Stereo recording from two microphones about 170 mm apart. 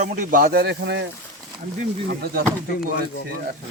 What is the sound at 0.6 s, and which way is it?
Speech, 90° right.